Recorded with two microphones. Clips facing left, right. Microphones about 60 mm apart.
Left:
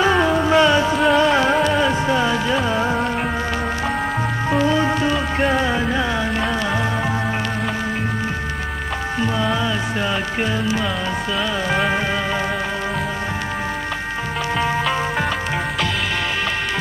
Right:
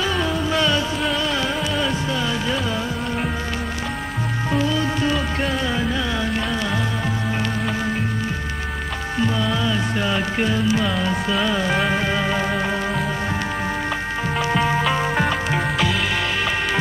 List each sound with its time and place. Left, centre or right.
0.0 s music: left
4.5 s music: left
9.2 s music: centre
14.5 s music: centre